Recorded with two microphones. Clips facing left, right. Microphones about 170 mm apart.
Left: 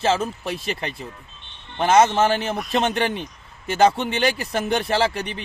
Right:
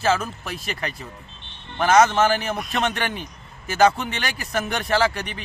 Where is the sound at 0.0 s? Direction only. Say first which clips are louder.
Left 1 dB; 25° left (ahead or behind).